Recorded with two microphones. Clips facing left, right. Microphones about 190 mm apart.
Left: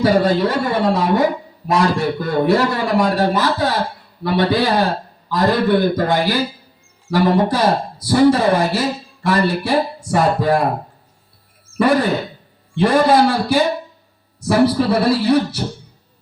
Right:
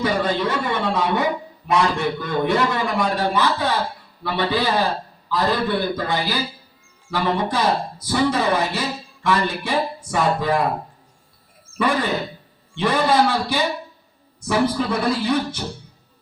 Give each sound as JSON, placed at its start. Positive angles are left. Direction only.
{"t": 0.0, "sound": "a man's voice", "side_deg": 40}
{"t": 11.8, "sound": "a man's voice", "side_deg": 40}